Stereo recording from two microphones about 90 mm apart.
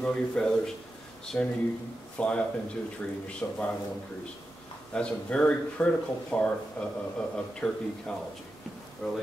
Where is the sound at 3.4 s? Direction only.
20° left (ahead or behind).